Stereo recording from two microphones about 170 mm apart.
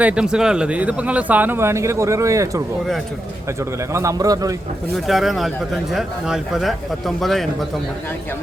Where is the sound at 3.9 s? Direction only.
20° right (ahead or behind).